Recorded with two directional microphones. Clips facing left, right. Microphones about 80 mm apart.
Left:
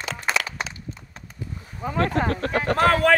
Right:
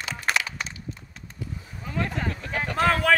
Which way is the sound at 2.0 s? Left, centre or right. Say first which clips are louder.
Left 7 dB; left.